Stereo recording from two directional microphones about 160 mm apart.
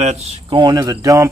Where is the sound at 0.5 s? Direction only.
30° right (ahead or behind).